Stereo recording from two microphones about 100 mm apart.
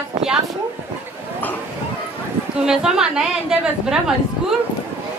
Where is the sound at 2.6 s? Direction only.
5° right (ahead or behind).